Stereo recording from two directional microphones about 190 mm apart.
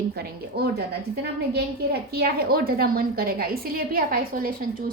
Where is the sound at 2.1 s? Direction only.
55° right (ahead or behind).